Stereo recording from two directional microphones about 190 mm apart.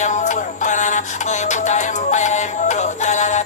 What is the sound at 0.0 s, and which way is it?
Music, 40° left (ahead or behind).